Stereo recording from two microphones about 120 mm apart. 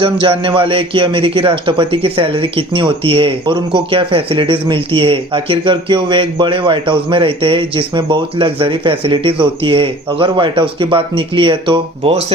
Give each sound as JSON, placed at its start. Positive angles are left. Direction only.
{"t": 0.0, "sound": "a man's voice", "side_deg": -45}